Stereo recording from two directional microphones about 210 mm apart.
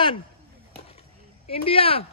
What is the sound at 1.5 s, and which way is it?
Speech, 25° left (ahead or behind).